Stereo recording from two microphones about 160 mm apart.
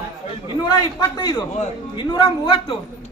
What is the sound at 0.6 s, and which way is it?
A man's voice, 25° left (ahead or behind).